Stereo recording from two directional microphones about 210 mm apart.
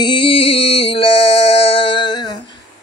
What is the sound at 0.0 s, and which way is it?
Music, 25° left (ahead or behind).